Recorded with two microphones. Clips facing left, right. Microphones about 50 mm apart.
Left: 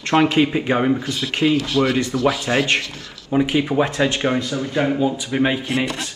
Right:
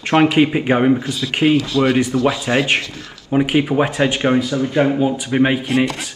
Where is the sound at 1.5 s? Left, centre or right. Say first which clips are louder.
Right 2 dB; left.